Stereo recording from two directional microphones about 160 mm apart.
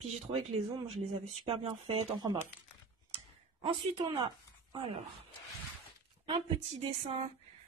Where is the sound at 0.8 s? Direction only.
40° right (ahead or behind).